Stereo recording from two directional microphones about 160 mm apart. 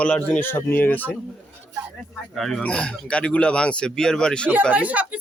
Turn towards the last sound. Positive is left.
turn(degrees=-10)  # may be behind; listen again after turning